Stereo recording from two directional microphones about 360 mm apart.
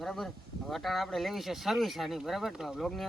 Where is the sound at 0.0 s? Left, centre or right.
Centre.